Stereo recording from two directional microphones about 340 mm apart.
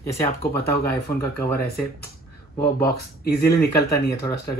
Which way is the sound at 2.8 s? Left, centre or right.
Left.